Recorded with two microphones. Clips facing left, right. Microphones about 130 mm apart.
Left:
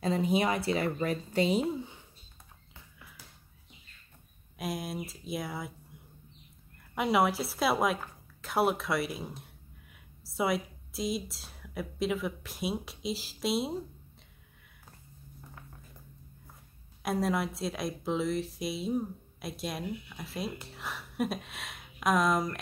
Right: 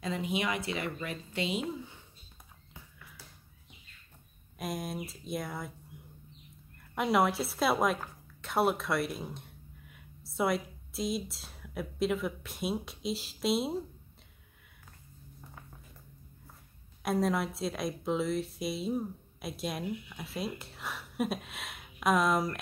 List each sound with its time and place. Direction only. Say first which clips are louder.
0.0 s speech: left 5 dB; 35° left (ahead or behind)
4.6 s a woman's voice: left 1 dB; centre (ahead or behind)
7.0 s a woman's voice: left 1 dB; centre (ahead or behind)
17.0 s a woman's voice: even; centre (ahead or behind)